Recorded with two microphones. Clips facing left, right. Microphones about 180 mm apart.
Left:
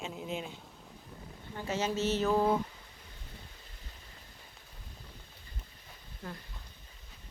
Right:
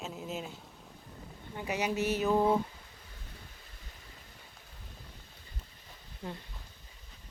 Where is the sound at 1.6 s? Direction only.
15° right (ahead or behind).